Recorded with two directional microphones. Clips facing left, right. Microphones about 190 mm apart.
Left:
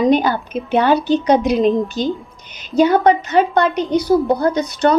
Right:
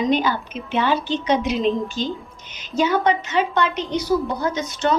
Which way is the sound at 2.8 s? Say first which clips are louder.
Left 6 dB; 55° left (ahead or behind).